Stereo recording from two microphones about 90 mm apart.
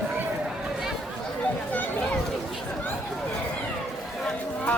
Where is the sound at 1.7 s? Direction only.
20° left (ahead or behind).